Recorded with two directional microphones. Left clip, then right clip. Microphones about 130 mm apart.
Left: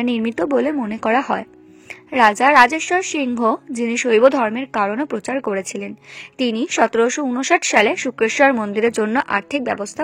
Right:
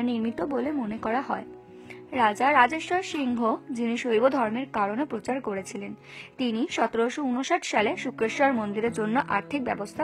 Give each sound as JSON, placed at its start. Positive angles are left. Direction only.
{"t": 0.0, "sound": "speech", "side_deg": 40}